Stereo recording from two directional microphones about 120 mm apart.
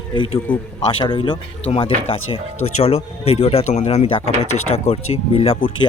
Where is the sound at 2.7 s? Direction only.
65° left (ahead or behind).